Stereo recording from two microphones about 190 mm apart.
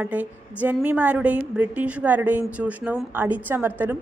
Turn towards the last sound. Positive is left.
turn(degrees=-10)  # may be behind; listen again after turning